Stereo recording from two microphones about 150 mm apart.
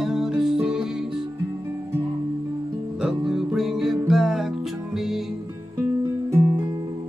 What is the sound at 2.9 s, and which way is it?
Music, 5° right (ahead or behind).